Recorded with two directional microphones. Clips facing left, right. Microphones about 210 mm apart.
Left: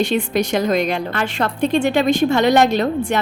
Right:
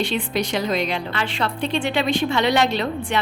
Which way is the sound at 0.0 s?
45° left (ahead or behind).